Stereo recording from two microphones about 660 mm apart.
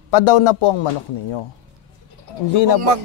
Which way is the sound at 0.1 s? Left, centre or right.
Left.